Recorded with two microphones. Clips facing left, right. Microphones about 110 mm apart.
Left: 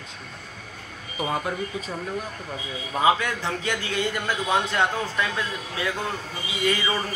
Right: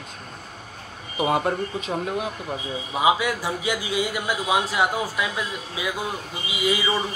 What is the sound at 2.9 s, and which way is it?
A man's voice, 10° right (ahead or behind).